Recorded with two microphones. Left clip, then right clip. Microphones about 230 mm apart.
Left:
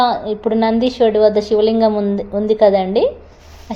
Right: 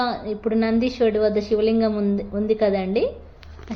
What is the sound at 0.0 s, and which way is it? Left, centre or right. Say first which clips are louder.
A woman's voice: left 9 dB; centre.